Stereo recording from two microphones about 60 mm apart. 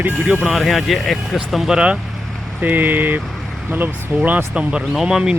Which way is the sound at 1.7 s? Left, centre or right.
Centre.